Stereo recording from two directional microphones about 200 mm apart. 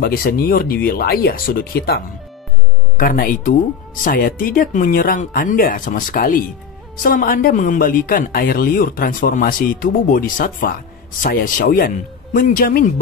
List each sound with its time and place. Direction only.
0.0 s speech: 45° left (ahead or behind)